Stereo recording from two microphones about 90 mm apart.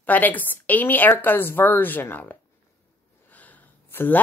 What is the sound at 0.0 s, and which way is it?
A woman's voice, 20° left (ahead or behind).